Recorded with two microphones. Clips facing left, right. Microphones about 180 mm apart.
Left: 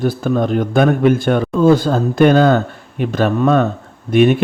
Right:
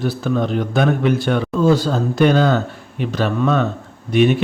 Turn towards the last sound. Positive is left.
turn(degrees=50)  # may be behind; listen again after turning